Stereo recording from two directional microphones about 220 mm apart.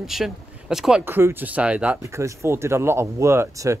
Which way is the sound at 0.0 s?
Centre (ahead or behind).